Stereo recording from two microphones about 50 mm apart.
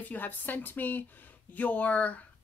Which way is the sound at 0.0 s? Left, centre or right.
Left.